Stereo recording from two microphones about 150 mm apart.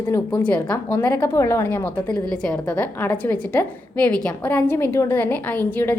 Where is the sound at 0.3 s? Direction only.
10° left (ahead or behind).